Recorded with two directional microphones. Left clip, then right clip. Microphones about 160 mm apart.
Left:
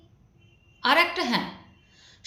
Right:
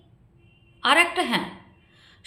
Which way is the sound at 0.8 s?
20° right (ahead or behind).